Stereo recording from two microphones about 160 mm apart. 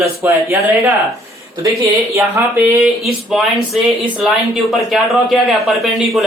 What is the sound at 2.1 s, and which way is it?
Speech, 15° right (ahead or behind).